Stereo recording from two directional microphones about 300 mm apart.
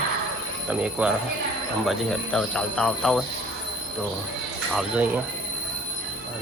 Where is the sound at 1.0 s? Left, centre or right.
Centre.